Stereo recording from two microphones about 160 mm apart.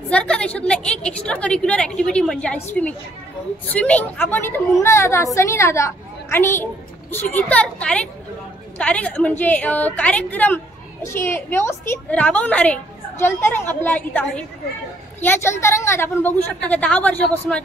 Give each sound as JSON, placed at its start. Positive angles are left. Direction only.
{"t": 0.1, "sound": "a woman's voice", "side_deg": 5}
{"t": 3.6, "sound": "a woman's voice", "side_deg": 10}